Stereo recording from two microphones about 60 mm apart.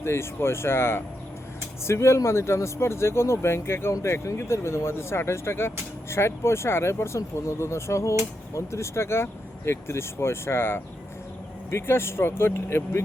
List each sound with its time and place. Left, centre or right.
0.0 s speech: left